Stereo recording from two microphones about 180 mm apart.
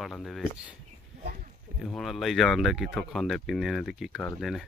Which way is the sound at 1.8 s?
Centre (ahead or behind).